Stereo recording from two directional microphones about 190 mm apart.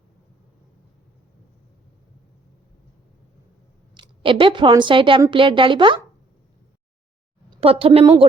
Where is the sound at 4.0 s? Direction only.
25° right (ahead or behind).